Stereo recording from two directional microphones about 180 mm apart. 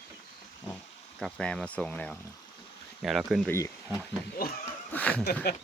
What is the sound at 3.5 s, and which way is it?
Speech, 15° left (ahead or behind).